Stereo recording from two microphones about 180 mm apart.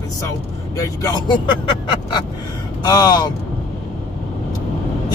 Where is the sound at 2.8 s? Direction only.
20° left (ahead or behind).